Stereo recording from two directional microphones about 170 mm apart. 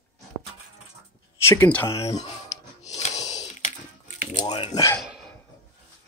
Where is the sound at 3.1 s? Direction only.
20° left (ahead or behind).